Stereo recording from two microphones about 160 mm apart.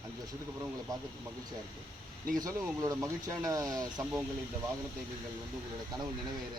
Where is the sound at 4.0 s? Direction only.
10° right (ahead or behind).